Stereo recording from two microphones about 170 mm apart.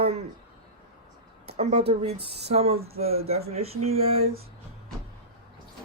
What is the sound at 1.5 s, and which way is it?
Speech, 40° right (ahead or behind).